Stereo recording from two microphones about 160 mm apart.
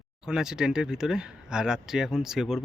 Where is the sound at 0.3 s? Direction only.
5° right (ahead or behind).